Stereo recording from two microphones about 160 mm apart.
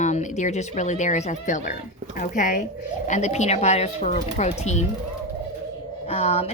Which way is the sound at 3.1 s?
45° left (ahead or behind).